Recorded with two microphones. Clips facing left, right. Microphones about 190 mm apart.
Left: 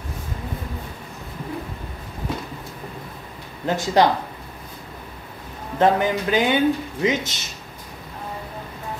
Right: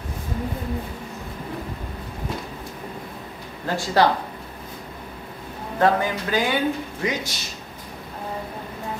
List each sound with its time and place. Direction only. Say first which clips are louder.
3.6 s speech: left 2 dB; 20° left (ahead or behind)
5.8 s speech: left 2 dB; 20° left (ahead or behind)